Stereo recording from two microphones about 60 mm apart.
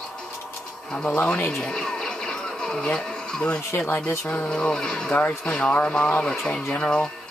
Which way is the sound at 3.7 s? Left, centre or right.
Left.